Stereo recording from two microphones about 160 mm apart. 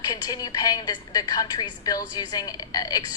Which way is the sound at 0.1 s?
25° left (ahead or behind).